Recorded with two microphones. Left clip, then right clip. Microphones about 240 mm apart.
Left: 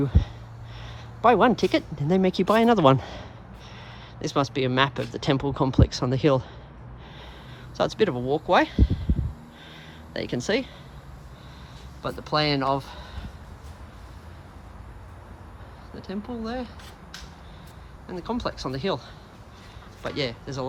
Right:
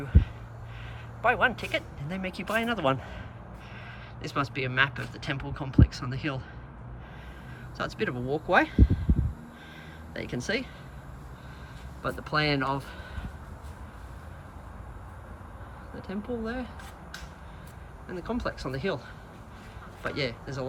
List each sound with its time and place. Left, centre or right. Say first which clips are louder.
1.2 s speech: left 6 dB; left
7.8 s speech: left 8 dB; centre
10.2 s speech: left 5 dB; centre
12.0 s speech: left 3 dB; centre
16.0 s speech: even; centre
18.1 s speech: left 3 dB; centre